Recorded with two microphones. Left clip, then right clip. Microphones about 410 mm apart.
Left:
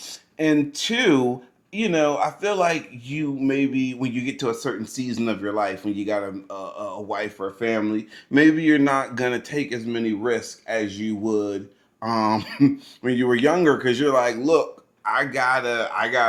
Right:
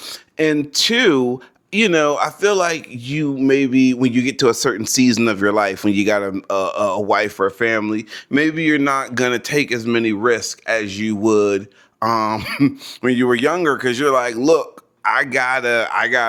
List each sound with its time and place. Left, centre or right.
0.3 s a man's voice: right
8.3 s a man's voice: right